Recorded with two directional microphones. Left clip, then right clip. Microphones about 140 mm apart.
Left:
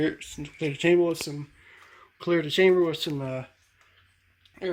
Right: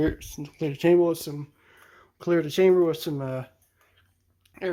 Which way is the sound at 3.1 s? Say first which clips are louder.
Right 1 dB; 5° right (ahead or behind).